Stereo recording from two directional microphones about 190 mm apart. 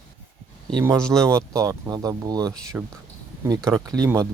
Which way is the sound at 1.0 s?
5° left (ahead or behind).